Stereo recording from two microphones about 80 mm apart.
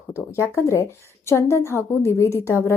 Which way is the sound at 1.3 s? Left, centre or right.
Left.